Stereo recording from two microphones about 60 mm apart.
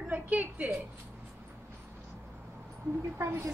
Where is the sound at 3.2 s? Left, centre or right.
Right.